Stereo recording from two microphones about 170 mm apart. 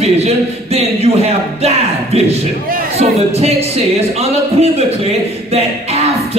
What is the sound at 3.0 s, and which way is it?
Speech, 40° right (ahead or behind).